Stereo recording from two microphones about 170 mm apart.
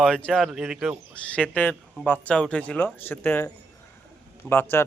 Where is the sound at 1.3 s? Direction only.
10° left (ahead or behind).